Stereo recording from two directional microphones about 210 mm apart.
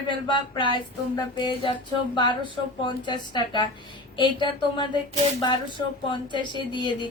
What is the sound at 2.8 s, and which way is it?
A woman's voice, 20° left (ahead or behind).